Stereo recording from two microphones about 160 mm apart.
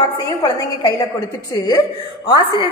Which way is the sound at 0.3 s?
25° left (ahead or behind).